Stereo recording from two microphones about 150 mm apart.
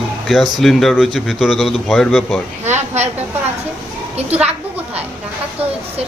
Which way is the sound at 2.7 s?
50° right (ahead or behind).